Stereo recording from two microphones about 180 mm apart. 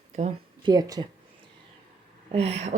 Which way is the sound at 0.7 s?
20° right (ahead or behind).